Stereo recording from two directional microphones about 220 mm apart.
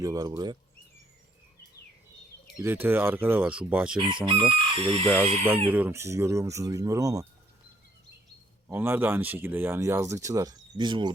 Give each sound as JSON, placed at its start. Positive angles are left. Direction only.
{"t": 0.0, "sound": "speech", "side_deg": -15}
{"t": 2.6, "sound": "speech", "side_deg": -10}
{"t": 3.9, "sound": "speech", "side_deg": -20}
{"t": 5.7, "sound": "speech", "side_deg": -10}
{"t": 8.7, "sound": "speech", "side_deg": -10}